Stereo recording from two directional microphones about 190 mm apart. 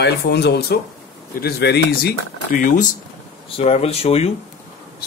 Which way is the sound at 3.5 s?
30° left (ahead or behind).